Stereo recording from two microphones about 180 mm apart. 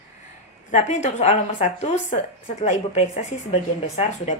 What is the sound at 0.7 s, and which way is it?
A woman's voice, 40° left (ahead or behind).